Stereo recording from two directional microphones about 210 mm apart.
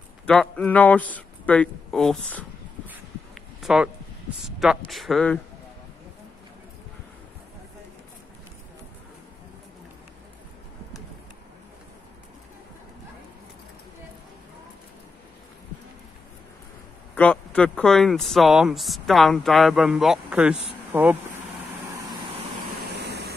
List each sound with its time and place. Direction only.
0.3 s a man's voice: 5° left (ahead or behind)
3.6 s speech: 5° right (ahead or behind)
17.1 s speech: 5° left (ahead or behind)
22.9 s waterfall: 50° right (ahead or behind)